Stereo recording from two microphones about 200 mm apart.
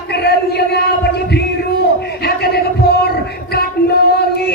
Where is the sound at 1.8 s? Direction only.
55° left (ahead or behind).